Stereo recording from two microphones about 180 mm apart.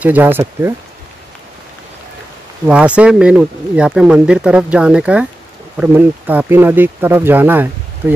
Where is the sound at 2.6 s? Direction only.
5° right (ahead or behind).